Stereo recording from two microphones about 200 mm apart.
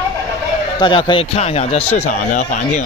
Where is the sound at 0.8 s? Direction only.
25° left (ahead or behind).